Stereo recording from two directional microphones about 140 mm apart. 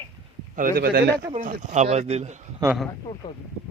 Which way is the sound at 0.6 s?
80° right.